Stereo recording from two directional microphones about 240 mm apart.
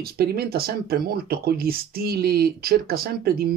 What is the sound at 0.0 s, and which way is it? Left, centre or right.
Speech, right.